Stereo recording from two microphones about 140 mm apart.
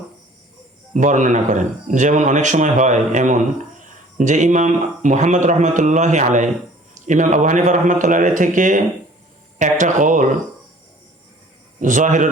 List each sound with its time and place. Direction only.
0.9 s speech: 65° right (ahead or behind)
11.8 s speech: 65° right (ahead or behind)